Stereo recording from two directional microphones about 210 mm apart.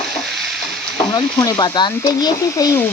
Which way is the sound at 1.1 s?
15° left (ahead or behind).